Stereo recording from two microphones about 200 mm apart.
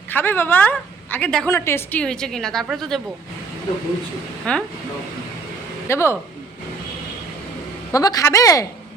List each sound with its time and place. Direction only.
0.1 s a woman's voice: 10° left (ahead or behind)
4.5 s speech: 5° left (ahead or behind)
5.9 s a woman's voice: 15° left (ahead or behind)
7.9 s a woman's voice: 15° left (ahead or behind)